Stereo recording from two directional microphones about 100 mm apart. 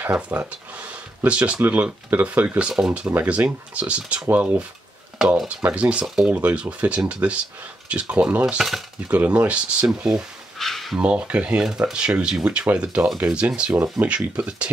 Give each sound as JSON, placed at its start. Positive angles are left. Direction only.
{"t": 0.0, "sound": "speech", "side_deg": -15}
{"t": 8.5, "sound": "cutlery", "side_deg": 0}
{"t": 9.1, "sound": "speech", "side_deg": -15}
{"t": 11.0, "sound": "speech", "side_deg": -10}